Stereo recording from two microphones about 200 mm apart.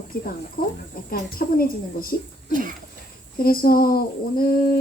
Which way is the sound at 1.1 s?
45° left (ahead or behind).